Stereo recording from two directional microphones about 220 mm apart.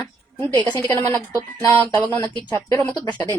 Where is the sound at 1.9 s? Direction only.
15° left (ahead or behind).